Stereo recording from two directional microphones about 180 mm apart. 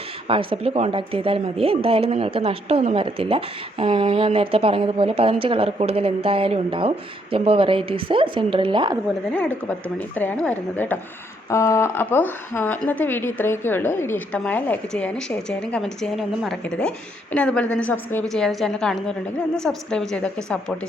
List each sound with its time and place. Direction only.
0.3 s speech: 30° right (ahead or behind)
9.3 s a woman's voice: 10° left (ahead or behind)